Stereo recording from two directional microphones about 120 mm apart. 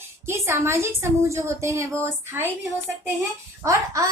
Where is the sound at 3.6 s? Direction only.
25° right (ahead or behind).